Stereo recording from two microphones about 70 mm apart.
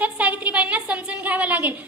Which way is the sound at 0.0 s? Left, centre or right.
Right.